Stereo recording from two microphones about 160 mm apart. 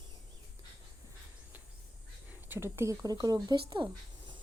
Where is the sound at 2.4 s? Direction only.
15° right (ahead or behind).